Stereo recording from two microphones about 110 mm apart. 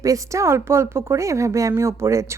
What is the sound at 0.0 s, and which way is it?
A woman's voice, 30° right (ahead or behind).